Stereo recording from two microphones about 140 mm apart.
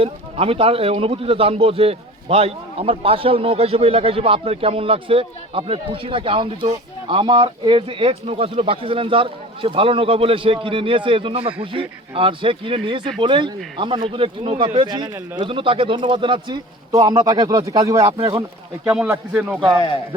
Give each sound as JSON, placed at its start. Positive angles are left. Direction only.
{"t": 0.0, "sound": "a man's voice", "side_deg": -45}
{"t": 18.2, "sound": "a man's voice", "side_deg": -35}
{"t": 18.9, "sound": "a man's voice", "side_deg": -10}